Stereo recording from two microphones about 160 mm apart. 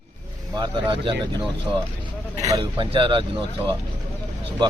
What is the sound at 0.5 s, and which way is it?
Speech, 30° right (ahead or behind).